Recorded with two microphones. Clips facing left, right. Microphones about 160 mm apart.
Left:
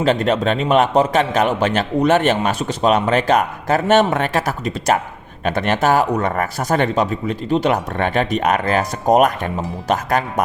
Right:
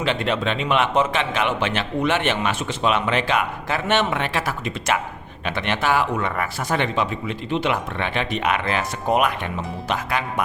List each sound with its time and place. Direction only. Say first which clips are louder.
0.0 s a man's voice: left 6 dB; 40° left (ahead or behind)